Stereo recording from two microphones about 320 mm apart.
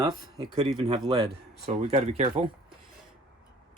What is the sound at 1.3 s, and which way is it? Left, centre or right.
Speech, right.